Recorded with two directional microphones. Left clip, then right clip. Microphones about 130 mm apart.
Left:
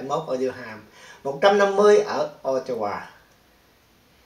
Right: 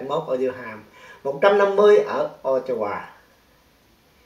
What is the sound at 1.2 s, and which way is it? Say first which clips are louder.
Speech: right 1 dB; 15° left (ahead or behind).